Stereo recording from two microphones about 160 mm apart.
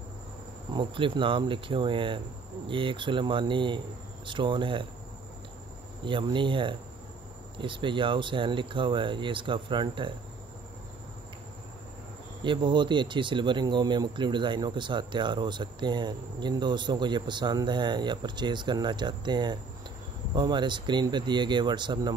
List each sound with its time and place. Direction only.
0.7 s speech: 30° right (ahead or behind)
6.0 s speech: 30° right (ahead or behind)
12.4 s speech: 30° right (ahead or behind)